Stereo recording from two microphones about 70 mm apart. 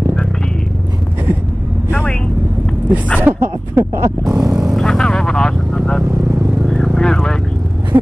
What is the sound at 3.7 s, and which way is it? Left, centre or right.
Speech, right.